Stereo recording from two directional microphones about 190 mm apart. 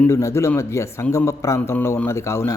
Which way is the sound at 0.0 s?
15° left (ahead or behind).